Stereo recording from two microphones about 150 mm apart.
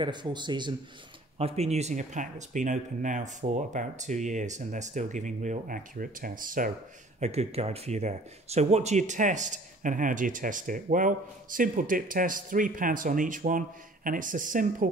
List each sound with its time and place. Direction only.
0.0 s speech: 30° right (ahead or behind)
1.4 s speech: 45° right (ahead or behind); by 6.7 s 65° right (ahead or behind)
7.2 s speech: 45° right (ahead or behind); by 14.9 s 65° right (ahead or behind)